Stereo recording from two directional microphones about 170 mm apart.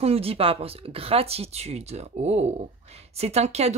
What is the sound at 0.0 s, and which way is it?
Speech, 35° right (ahead or behind).